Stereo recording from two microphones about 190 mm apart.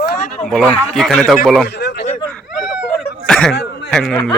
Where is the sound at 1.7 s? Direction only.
60° left (ahead or behind).